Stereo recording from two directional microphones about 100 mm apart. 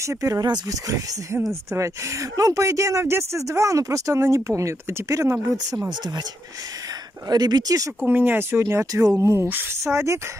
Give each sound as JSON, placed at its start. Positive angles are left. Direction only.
{"t": 0.0, "sound": "speech", "side_deg": -30}
{"t": 5.9, "sound": "speech", "side_deg": -45}
{"t": 7.2, "sound": "speech", "side_deg": -40}
{"t": 8.0, "sound": "speech", "side_deg": -20}